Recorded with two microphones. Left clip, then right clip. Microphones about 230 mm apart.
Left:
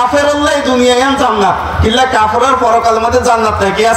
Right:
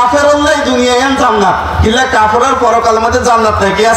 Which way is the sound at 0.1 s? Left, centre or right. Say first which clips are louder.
Right 2 dB; left.